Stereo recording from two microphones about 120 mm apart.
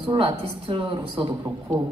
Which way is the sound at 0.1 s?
50° right (ahead or behind).